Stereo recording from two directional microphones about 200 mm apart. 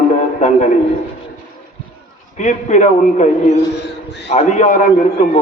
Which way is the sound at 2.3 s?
40° left (ahead or behind).